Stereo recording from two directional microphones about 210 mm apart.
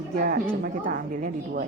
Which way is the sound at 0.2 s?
40° right (ahead or behind).